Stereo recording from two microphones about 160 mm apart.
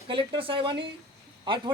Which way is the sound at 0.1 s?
30° right (ahead or behind).